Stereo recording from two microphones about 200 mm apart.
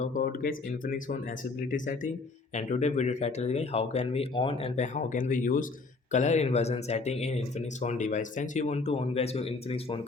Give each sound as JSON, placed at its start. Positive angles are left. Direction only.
{"t": 0.0, "sound": "speech", "side_deg": 45}
{"t": 2.6, "sound": "speech", "side_deg": 35}